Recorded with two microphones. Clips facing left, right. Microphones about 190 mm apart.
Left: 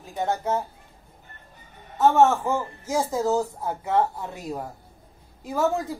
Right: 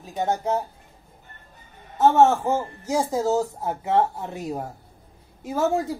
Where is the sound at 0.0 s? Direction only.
20° right (ahead or behind).